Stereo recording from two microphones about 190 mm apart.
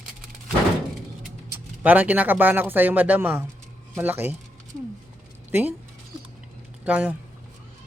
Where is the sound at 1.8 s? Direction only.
10° right (ahead or behind).